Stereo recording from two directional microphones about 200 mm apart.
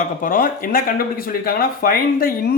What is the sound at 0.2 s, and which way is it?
Speech, 45° left (ahead or behind).